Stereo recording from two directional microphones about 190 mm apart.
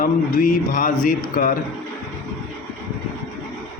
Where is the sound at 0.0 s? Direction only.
45° left (ahead or behind).